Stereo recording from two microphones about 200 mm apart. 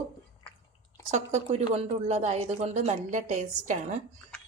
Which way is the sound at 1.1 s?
35° right (ahead or behind).